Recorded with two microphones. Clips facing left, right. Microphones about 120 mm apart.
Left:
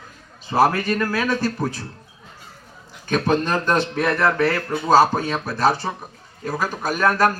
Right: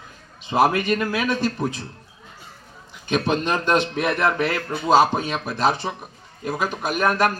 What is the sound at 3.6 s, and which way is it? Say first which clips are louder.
Speech: right 1 dB; 15° right (ahead or behind).